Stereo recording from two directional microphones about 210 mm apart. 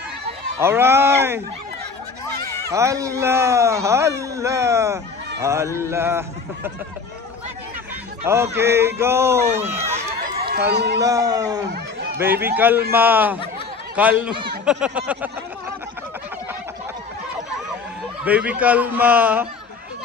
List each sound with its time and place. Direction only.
0.6 s speech: 10° right (ahead or behind)
2.7 s speech: 15° right (ahead or behind)
8.2 s speech: 10° right (ahead or behind)
9.8 s run: 30° right (ahead or behind)
10.4 s speech: 50° right (ahead or behind)
11.0 s speech: 15° right (ahead or behind)
18.2 s speech: 5° right (ahead or behind)